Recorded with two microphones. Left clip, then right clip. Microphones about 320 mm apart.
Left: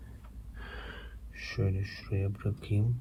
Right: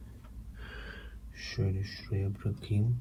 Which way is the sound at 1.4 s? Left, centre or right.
Centre.